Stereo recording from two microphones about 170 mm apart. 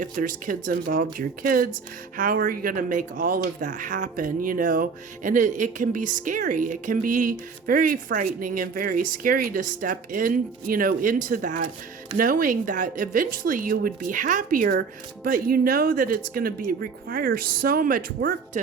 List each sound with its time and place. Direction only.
0.0 s speech: 50° right (ahead or behind)